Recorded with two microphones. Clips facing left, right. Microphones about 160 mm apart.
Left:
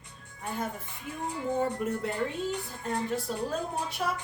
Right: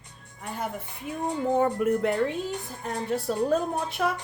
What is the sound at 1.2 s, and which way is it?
A woman's voice, 65° right (ahead or behind).